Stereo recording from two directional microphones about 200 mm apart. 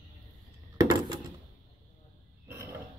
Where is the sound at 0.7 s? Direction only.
20° right (ahead or behind).